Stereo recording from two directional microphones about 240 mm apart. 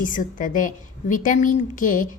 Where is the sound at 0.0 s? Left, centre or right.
Left.